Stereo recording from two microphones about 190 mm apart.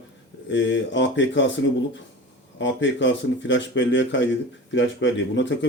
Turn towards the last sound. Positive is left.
turn(degrees=75)  # may be behind; listen again after turning